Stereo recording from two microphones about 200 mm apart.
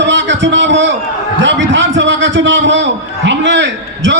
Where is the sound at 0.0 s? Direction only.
65° right (ahead or behind).